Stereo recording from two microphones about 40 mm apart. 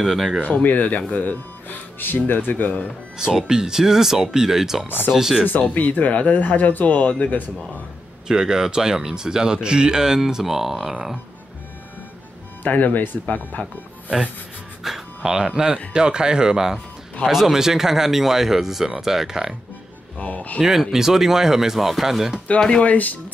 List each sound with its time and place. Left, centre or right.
0.0 s speech: centre
0.6 s speech: left
3.2 s speech: centre
4.8 s speech: left
5.1 s speech: centre
5.8 s speech: left
8.3 s speech: centre
12.6 s speech: left
14.8 s music: centre
15.2 s speech: right
20.2 s speech: left
20.6 s speech: centre
22.8 s speech: left